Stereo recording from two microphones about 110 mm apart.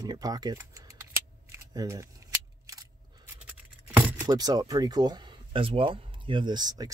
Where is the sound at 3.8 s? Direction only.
20° right (ahead or behind).